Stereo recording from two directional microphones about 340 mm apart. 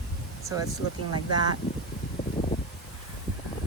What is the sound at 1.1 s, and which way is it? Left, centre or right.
Speech, right.